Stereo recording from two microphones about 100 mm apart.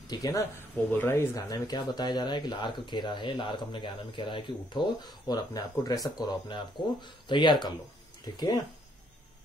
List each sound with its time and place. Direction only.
0.1 s speech: 35° left (ahead or behind)
1.5 s speech: 40° left (ahead or behind)
6.1 s speech: 50° left (ahead or behind)